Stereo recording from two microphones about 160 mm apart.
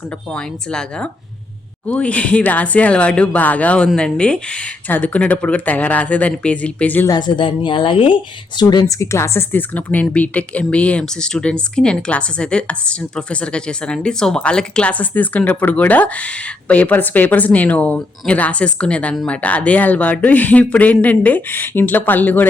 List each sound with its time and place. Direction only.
0.3 s speech: 5° left (ahead or behind)
7.1 s a woman's voice: 25° left (ahead or behind); by 22.4 s 10° left (ahead or behind)